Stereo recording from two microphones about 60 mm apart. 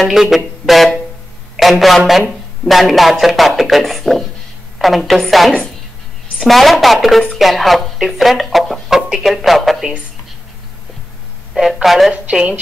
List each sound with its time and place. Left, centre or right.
0.0 s a sound: centre
1.6 s speech: centre
11.5 s speech: centre
12.1 s a woman's voice: centre